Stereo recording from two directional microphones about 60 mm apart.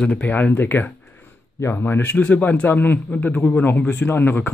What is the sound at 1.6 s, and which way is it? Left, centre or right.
A man's voice, left.